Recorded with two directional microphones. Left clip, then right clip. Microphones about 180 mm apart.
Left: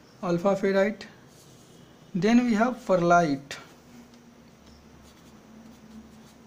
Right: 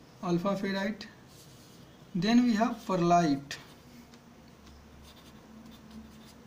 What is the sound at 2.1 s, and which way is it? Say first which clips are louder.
Speech: left 4 dB; 40° left (ahead or behind).